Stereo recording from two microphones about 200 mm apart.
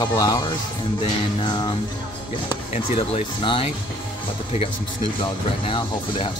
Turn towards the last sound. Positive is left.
turn(degrees=25)  # may be behind; listen again after turning